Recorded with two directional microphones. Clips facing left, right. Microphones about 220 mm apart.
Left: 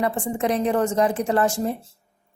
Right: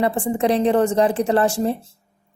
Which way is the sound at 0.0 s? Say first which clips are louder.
Right 4 dB; 30° right (ahead or behind).